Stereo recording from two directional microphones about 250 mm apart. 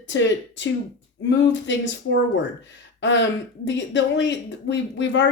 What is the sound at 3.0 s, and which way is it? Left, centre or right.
Speech, left.